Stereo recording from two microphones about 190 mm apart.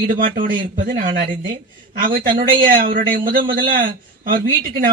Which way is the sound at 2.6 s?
50° right (ahead or behind).